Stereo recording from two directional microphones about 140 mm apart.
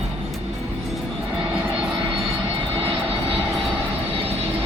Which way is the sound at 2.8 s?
40° right (ahead or behind).